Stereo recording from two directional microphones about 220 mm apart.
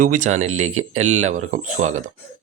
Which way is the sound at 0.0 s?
35° right (ahead or behind).